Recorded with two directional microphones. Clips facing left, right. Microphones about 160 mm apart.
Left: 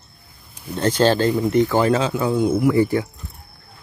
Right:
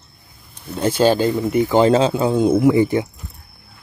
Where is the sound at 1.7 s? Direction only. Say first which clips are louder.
Right 4 dB; 25° right (ahead or behind).